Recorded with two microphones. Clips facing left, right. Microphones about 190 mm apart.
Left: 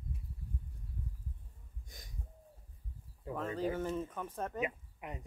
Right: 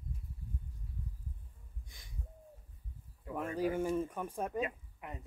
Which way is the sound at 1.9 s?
45° left (ahead or behind).